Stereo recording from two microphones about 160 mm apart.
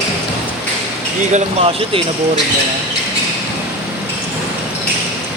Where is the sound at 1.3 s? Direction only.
40° right (ahead or behind).